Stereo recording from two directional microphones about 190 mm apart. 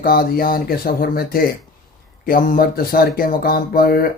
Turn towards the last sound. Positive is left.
turn(degrees=50)  # may be behind; listen again after turning